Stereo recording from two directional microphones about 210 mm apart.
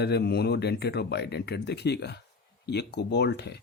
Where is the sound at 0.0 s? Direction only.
50° left (ahead or behind).